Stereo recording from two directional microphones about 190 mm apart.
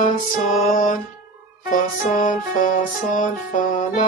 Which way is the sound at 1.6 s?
45° left (ahead or behind).